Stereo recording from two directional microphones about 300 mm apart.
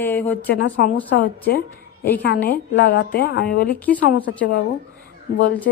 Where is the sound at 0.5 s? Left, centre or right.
Left.